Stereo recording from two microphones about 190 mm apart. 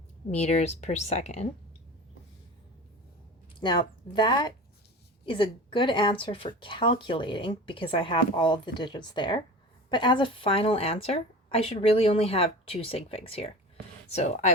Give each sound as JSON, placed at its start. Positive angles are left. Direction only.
{"t": 0.3, "sound": "speech", "side_deg": 35}
{"t": 3.6, "sound": "speech", "side_deg": 25}